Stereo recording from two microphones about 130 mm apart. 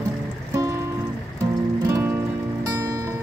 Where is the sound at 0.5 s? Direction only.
25° right (ahead or behind).